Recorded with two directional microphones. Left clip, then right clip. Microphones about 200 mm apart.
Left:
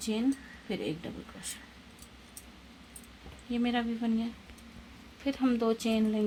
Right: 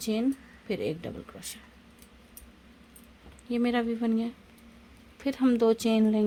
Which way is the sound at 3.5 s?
60° right (ahead or behind).